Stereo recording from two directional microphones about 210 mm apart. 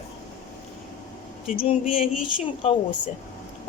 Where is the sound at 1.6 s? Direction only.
25° left (ahead or behind).